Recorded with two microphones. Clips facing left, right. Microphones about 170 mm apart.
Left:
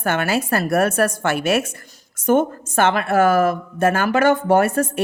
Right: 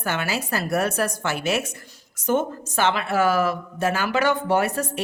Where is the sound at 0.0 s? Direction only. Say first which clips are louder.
Left 6 dB; 55° left (ahead or behind).